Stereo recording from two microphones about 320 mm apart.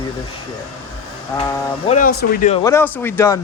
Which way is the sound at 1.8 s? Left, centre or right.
Left.